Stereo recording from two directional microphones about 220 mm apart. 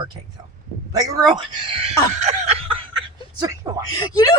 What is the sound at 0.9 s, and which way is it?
Speech, 20° right (ahead or behind).